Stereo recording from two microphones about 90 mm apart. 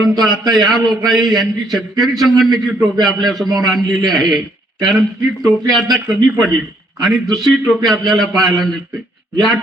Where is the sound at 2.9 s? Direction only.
45° right (ahead or behind).